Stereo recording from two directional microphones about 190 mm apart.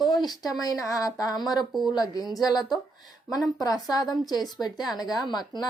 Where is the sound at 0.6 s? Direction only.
20° left (ahead or behind).